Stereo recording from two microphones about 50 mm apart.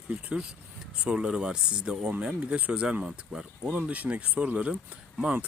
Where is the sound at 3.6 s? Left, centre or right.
Right.